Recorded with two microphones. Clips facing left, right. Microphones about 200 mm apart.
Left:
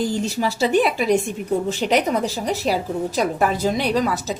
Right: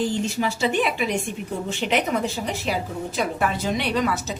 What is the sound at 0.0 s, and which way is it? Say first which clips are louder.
A woman's voice: left 2 dB; 40° left (ahead or behind).